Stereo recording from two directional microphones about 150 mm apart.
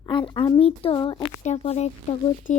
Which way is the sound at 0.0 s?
35° left (ahead or behind).